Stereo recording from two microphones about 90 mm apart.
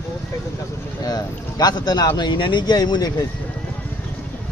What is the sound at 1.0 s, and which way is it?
Speech, 45° left (ahead or behind).